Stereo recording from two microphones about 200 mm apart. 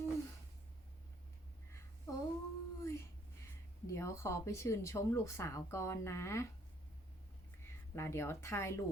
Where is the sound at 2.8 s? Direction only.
15° left (ahead or behind).